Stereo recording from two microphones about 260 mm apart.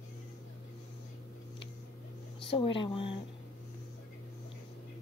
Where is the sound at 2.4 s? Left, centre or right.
Centre.